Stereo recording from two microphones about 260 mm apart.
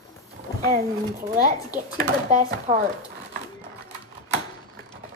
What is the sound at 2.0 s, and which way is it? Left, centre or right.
Speech, right.